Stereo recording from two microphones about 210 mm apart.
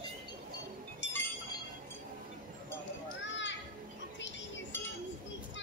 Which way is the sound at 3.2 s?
60° left (ahead or behind).